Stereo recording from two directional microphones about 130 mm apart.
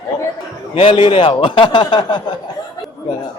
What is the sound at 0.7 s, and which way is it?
Speech, 45° left (ahead or behind).